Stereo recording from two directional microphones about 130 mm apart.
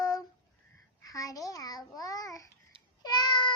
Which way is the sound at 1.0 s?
25° left (ahead or behind).